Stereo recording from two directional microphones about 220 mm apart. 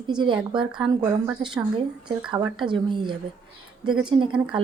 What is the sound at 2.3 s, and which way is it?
Speech, 20° right (ahead or behind).